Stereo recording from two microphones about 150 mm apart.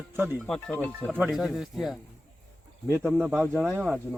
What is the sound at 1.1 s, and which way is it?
Speech, 5° right (ahead or behind).